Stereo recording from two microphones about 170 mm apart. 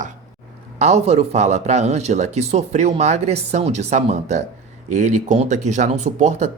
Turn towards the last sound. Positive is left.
turn(degrees=-45)  # may be behind; listen again after turning